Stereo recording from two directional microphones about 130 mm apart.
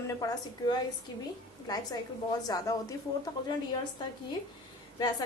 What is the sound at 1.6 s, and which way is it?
A woman's voice, 30° left (ahead or behind).